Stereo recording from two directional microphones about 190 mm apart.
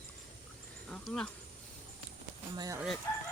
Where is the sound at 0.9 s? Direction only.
5° left (ahead or behind).